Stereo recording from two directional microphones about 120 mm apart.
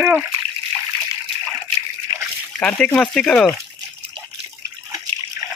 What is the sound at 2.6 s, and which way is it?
Speech, 10° left (ahead or behind).